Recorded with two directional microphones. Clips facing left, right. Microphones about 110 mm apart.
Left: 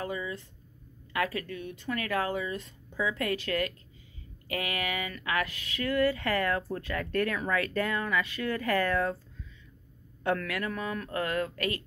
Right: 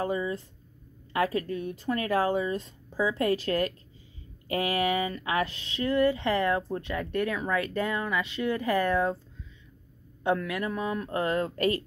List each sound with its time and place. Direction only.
0.0 s speech: 35° right (ahead or behind)
10.2 s speech: 20° right (ahead or behind)